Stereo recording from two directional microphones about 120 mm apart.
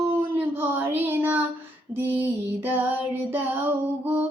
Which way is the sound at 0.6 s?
15° right (ahead or behind).